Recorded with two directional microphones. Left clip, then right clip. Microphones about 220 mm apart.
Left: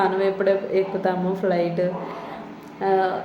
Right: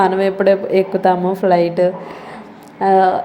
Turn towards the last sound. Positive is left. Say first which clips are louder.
# right 9 dB
turn(degrees=-30)  # may be behind; listen again after turning